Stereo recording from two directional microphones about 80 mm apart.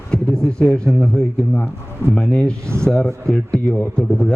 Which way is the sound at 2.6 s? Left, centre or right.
Right.